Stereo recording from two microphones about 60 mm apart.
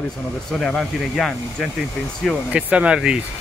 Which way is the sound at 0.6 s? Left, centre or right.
Centre.